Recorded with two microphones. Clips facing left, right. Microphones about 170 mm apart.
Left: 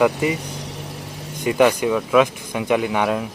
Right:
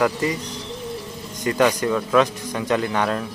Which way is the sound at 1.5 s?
15° left (ahead or behind).